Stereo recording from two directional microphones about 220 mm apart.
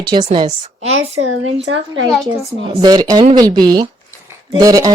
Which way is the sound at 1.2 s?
65° right (ahead or behind).